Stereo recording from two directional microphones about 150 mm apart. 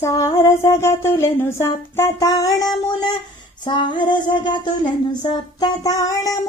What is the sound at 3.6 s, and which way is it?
Speech, 30° left (ahead or behind).